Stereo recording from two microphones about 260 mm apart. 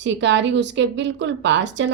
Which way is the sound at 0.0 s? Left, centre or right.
Right.